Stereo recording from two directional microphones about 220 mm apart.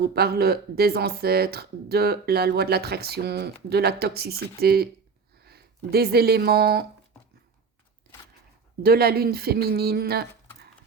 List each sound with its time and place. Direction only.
0.0 s speech: 45° right (ahead or behind)
8.8 s speech: 45° right (ahead or behind)